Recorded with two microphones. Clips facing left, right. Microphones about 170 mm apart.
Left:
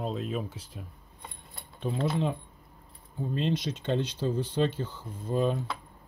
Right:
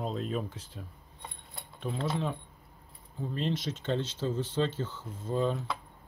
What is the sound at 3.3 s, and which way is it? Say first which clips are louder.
Speech: left 3 dB; 15° left (ahead or behind).